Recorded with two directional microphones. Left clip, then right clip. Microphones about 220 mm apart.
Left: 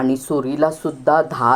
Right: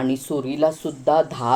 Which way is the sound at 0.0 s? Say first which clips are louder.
Left 4 dB; 15° left (ahead or behind).